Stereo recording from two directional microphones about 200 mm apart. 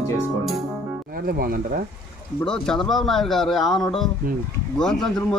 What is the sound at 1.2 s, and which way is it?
Speech, 50° right (ahead or behind).